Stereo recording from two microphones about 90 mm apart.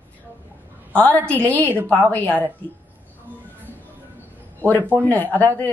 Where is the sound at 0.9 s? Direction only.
20° left (ahead or behind).